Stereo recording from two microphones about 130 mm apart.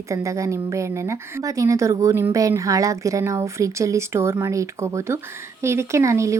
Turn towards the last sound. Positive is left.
turn(degrees=-25)  # may be behind; listen again after turning